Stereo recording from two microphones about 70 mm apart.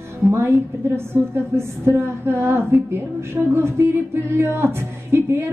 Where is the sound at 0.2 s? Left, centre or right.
Right.